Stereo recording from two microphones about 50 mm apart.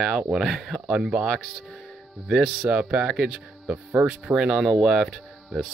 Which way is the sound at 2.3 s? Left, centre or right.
Centre.